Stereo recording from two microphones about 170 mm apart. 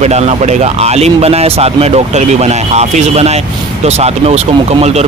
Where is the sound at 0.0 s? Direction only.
40° right (ahead or behind).